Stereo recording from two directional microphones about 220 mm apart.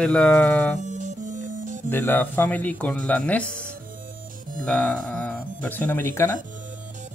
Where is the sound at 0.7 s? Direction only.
35° right (ahead or behind).